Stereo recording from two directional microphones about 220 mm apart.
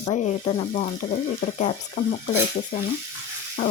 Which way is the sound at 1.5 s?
35° left (ahead or behind).